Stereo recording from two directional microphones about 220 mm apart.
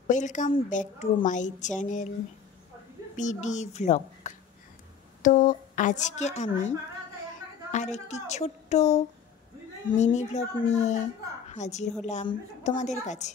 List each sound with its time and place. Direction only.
0.1 s a woman's voice: 35° left (ahead or behind)
3.2 s a woman's voice: 35° left (ahead or behind)
7.7 s a woman's voice: 30° left (ahead or behind)